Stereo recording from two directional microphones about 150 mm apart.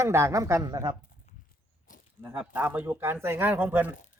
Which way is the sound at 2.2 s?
10° right (ahead or behind).